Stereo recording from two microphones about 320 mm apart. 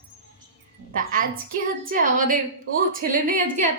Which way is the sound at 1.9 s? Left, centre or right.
Right.